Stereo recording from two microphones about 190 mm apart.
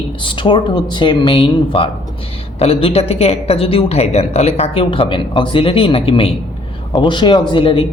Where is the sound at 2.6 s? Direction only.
30° left (ahead or behind).